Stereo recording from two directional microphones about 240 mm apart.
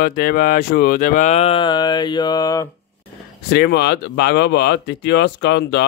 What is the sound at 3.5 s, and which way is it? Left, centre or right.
Speech, left.